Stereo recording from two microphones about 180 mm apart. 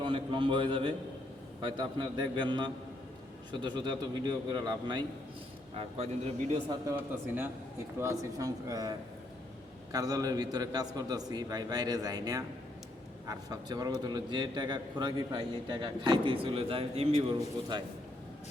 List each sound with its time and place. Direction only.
0.0 s a man's voice: 25° right (ahead or behind)
6.8 s a man's voice: 10° right (ahead or behind); by 17.8 s 25° right (ahead or behind)